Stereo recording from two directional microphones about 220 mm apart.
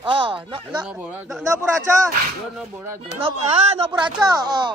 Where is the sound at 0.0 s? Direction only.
20° right (ahead or behind).